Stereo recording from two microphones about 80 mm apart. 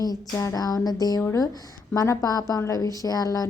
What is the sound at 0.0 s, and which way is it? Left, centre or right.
A woman's voice, left.